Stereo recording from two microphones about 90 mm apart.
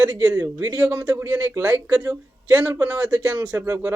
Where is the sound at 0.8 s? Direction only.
20° right (ahead or behind).